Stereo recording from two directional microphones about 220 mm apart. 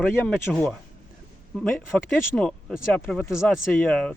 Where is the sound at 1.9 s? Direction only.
5° left (ahead or behind).